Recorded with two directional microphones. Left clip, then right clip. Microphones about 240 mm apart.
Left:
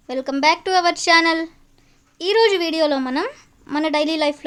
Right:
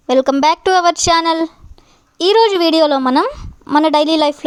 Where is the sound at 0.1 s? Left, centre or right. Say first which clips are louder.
Right 6 dB; right.